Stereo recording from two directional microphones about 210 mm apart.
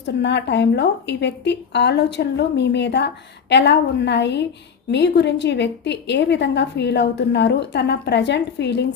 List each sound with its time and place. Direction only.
0.0 s a woman's voice: 55° left (ahead or behind)